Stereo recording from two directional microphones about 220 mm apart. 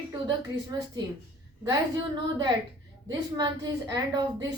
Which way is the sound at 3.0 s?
15° right (ahead or behind).